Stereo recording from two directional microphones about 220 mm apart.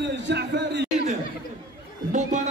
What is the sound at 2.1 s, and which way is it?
Chatter, 35° right (ahead or behind).